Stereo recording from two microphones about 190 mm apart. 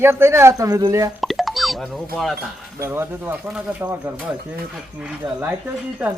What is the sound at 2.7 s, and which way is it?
Speech, 15° right (ahead or behind).